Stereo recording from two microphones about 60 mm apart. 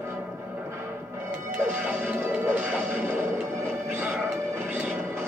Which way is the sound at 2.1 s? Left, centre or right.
Right.